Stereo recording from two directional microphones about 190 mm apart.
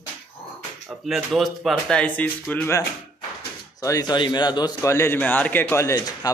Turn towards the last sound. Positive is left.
turn(degrees=15)  # may be behind; listen again after turning